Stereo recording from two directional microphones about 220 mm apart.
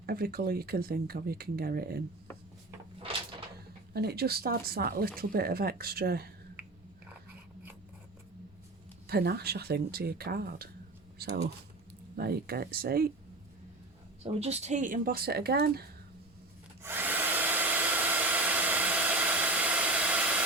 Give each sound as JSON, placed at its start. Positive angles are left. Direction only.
{"t": 0.0, "sound": "speech", "side_deg": -45}
{"t": 3.9, "sound": "speech", "side_deg": -45}
{"t": 9.0, "sound": "speech", "side_deg": -45}
{"t": 14.3, "sound": "speech", "side_deg": -30}
{"t": 16.8, "sound": "hair dryer", "side_deg": -10}